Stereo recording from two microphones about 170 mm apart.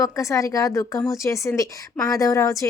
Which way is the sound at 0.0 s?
20° left (ahead or behind).